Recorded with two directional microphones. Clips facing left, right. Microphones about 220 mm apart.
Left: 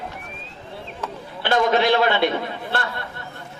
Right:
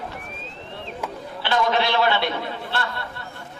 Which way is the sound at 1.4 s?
50° left (ahead or behind).